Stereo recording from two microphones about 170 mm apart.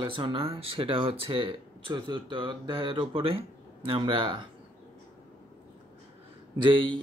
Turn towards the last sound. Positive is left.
turn(degrees=-30)  # may be behind; listen again after turning